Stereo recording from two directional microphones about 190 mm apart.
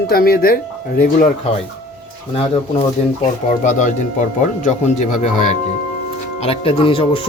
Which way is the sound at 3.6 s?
40° left (ahead or behind).